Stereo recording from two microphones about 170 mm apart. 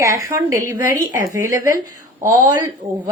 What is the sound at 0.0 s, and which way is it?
Speech, 15° right (ahead or behind).